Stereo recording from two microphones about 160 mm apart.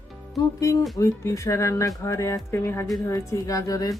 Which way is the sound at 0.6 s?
20° left (ahead or behind).